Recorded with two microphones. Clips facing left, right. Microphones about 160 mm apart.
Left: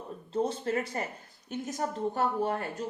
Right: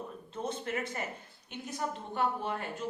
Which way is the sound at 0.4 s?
35° left (ahead or behind).